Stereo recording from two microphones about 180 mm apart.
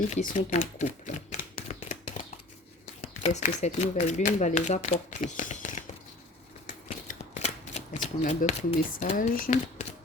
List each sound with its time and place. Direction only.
0.1 s typewriter: 40° left (ahead or behind)
3.0 s speech: 40° left (ahead or behind)
6.8 s shuffling cards: 40° left (ahead or behind)